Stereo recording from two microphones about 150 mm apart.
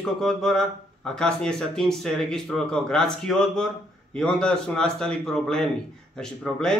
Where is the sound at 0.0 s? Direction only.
Centre (ahead or behind).